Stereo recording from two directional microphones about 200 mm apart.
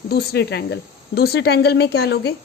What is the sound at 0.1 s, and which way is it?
A woman's voice, 50° left (ahead or behind).